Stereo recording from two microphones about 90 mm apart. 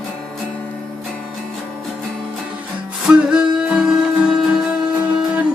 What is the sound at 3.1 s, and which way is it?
Music, 10° right (ahead or behind).